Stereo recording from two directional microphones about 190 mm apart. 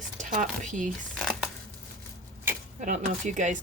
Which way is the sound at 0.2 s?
40° right (ahead or behind).